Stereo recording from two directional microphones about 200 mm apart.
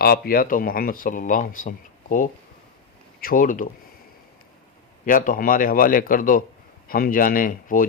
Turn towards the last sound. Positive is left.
turn(degrees=45)  # may be behind; listen again after turning